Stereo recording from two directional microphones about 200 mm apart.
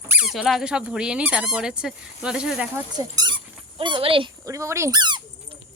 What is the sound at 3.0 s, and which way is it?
Speech, 15° right (ahead or behind).